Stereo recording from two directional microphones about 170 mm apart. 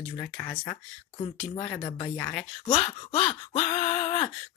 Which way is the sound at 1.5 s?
35° left (ahead or behind).